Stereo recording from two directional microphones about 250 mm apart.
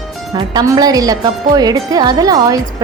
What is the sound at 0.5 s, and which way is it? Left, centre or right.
A woman's voice, centre.